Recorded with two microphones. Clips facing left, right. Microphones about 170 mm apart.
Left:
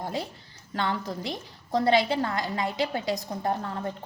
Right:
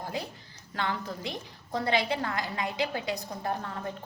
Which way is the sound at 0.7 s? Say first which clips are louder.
Left 3 dB; 35° left (ahead or behind).